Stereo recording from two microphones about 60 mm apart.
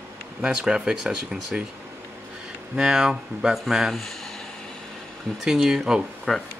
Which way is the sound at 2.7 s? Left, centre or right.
Centre.